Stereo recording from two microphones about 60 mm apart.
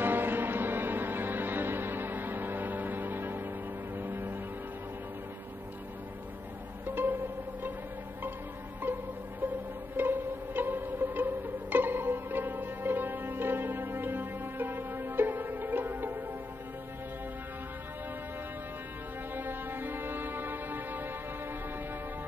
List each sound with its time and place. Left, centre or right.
0.0 s music: right
6.9 s pizzicato: right
8.9 s music: right
19.3 s music: right